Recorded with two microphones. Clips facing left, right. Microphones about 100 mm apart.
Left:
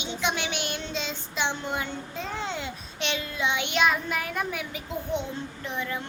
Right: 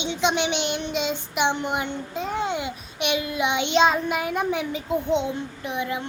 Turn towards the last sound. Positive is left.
turn(degrees=-15)  # may be behind; listen again after turning